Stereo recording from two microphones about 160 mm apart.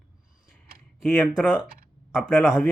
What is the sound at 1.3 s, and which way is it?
Speech, 5° right (ahead or behind).